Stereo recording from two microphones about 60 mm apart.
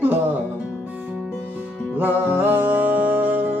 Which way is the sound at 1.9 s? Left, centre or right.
Right.